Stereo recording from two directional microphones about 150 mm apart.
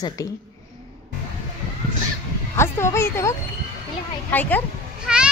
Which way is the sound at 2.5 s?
20° left (ahead or behind).